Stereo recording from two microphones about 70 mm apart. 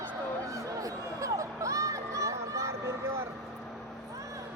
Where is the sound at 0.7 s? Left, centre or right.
Right.